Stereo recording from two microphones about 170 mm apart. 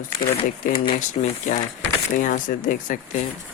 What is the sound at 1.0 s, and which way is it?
Speech, 45° left (ahead or behind).